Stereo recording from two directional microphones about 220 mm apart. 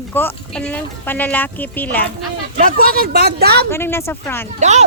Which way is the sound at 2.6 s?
40° right (ahead or behind).